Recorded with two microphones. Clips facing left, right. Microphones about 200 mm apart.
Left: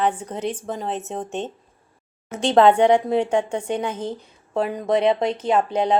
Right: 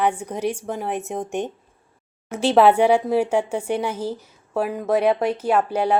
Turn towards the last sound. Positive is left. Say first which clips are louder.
# even
turn(degrees=-10)  # may be behind; listen again after turning